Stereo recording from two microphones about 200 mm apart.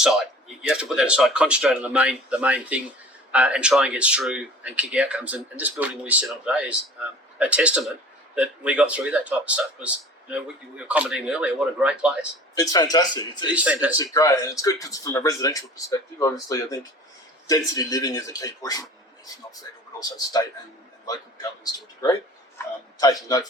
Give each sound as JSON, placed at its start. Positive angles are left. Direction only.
{"t": 0.6, "sound": "speech", "side_deg": -5}
{"t": 12.5, "sound": "speech", "side_deg": 20}
{"t": 22.5, "sound": "speech", "side_deg": 20}